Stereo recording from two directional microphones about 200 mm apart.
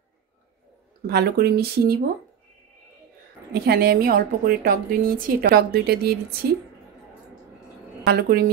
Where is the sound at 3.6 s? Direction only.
50° right (ahead or behind).